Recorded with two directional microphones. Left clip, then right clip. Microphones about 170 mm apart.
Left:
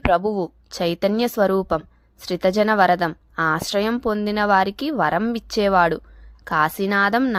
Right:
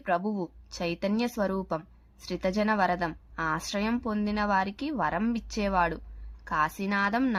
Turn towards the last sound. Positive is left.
turn(degrees=45)  # may be behind; listen again after turning